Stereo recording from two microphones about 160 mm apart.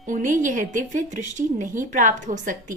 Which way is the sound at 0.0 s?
55° right (ahead or behind).